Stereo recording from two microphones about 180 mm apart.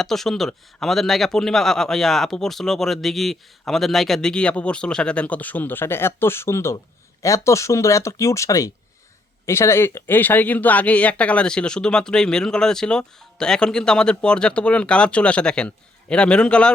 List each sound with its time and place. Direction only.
0.0 s speech: centre (ahead or behind)